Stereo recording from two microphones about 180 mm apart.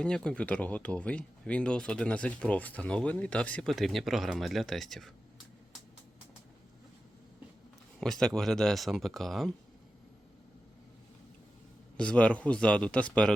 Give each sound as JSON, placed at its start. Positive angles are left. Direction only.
{"t": 0.3, "sound": "speech", "side_deg": 5}
{"t": 8.0, "sound": "speech", "side_deg": 0}
{"t": 11.9, "sound": "speech", "side_deg": 5}